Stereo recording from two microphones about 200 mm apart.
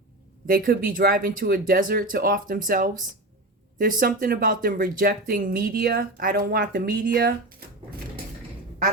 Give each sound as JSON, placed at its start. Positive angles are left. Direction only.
{"t": 0.4, "sound": "speech", "side_deg": -45}